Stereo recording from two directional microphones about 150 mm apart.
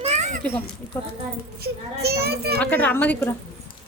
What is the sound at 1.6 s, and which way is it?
Speech, 90° right.